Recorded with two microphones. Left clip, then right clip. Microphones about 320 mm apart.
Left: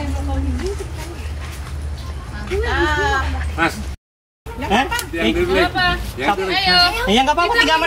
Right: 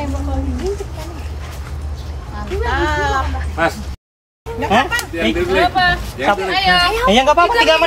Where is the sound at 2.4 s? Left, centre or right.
Centre.